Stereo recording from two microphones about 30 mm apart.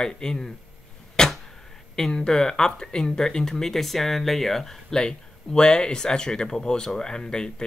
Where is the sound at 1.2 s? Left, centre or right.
Left.